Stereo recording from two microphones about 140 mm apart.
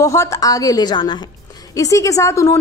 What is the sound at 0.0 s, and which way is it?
A woman's voice, 20° left (ahead or behind).